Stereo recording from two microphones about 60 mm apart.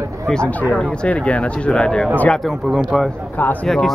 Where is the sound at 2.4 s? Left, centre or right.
Centre.